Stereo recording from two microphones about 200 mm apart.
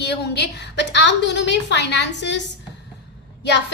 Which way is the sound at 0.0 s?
55° left (ahead or behind).